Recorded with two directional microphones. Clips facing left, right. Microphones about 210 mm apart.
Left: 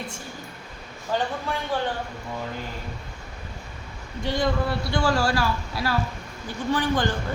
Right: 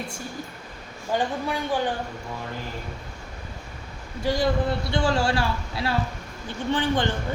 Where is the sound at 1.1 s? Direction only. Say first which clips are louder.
Right 1 dB; 15° right (ahead or behind).